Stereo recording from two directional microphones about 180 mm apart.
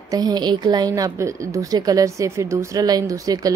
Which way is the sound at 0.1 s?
20° right (ahead or behind).